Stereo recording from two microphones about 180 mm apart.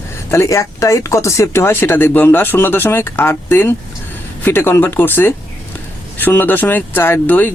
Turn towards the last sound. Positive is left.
turn(degrees=10)  # may be behind; listen again after turning